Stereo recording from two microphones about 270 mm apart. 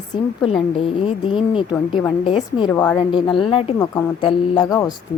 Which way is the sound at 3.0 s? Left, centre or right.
Centre.